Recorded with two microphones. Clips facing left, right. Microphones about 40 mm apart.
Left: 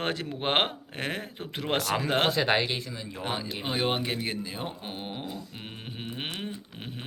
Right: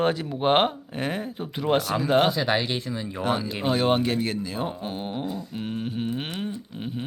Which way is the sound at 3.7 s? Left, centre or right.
Centre.